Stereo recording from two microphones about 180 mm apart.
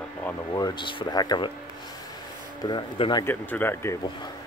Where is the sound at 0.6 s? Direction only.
25° left (ahead or behind).